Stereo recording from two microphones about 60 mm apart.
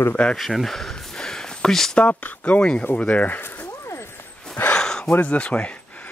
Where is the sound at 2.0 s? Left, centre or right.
Left.